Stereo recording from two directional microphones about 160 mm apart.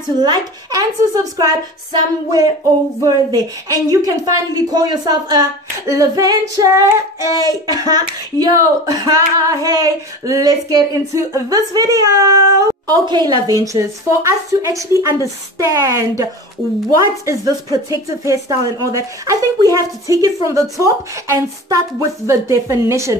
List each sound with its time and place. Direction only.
0.2 s speech: 25° right (ahead or behind)
3.6 s a woman's voice: 20° right (ahead or behind)